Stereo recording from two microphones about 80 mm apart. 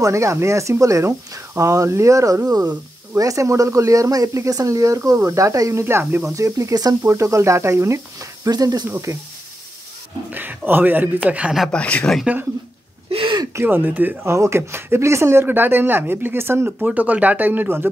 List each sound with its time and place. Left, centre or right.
0.0 s speech: right
6.3 s speech: right
6.7 s speech: right
7.1 s speech: right
8.5 s speech: right
10.3 s speech: right
11.7 s speech: centre
13.2 s a sound: right
13.6 s speech: right
14.2 s speech: right
16.8 s speech: centre